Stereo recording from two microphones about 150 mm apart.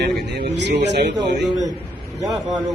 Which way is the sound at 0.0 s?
90° right.